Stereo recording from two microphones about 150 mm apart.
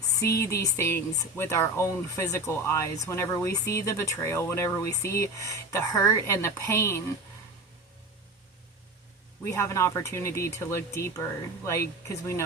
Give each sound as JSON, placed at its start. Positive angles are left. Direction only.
{"t": 0.2, "sound": "speech", "side_deg": 20}
{"t": 9.4, "sound": "speech", "side_deg": 20}